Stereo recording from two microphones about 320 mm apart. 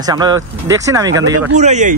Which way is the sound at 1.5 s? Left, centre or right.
Right.